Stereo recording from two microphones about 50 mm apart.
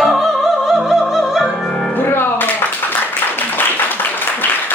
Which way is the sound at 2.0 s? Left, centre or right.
Left.